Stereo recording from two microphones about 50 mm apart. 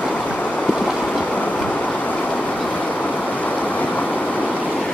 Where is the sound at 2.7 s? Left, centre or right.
Left.